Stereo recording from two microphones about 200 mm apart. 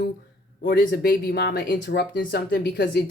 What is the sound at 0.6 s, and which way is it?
Speech, 50° left (ahead or behind).